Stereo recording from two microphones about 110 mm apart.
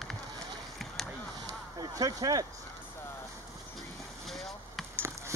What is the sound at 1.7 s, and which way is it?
Speech, 35° right (ahead or behind).